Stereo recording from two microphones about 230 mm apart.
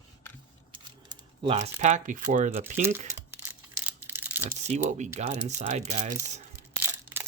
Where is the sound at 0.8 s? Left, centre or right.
Right.